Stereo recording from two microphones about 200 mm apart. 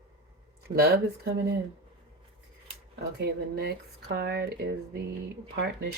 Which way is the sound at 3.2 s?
55° right (ahead or behind).